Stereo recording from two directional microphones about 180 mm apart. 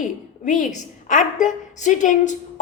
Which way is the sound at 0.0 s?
45° left (ahead or behind).